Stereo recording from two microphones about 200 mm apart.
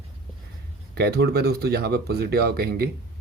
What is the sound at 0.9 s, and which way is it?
Speech, 50° right (ahead or behind).